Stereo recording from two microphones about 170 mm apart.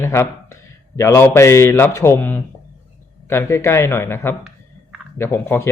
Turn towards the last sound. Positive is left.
turn(degrees=15)  # may be behind; listen again after turning